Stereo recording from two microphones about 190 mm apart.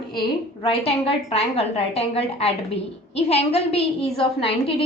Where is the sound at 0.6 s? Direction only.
30° left (ahead or behind).